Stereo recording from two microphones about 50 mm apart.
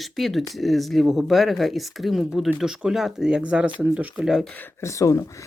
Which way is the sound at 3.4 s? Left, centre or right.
Right.